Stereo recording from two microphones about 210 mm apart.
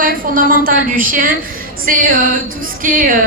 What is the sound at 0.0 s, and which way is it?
A woman's voice, 40° right (ahead or behind).